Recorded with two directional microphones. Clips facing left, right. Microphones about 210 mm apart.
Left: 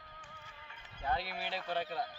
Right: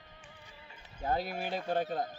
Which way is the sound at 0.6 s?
30° right (ahead or behind).